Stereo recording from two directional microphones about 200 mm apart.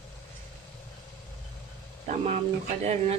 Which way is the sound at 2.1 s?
35° right (ahead or behind).